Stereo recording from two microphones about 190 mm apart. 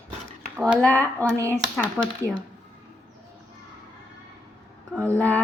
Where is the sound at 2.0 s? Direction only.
10° right (ahead or behind).